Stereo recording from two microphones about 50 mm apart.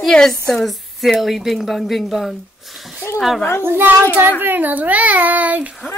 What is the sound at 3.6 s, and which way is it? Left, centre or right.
Speech, right.